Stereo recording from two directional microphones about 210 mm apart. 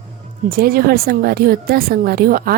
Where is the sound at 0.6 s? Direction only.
45° right (ahead or behind).